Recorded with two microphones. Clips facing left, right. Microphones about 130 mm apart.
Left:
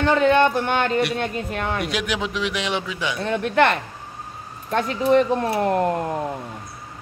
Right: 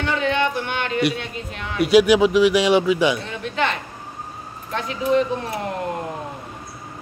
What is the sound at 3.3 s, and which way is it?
Speech, 60° left (ahead or behind).